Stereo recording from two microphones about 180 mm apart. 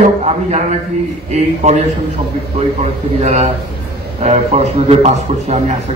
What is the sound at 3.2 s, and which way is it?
A man's voice, 35° right (ahead or behind).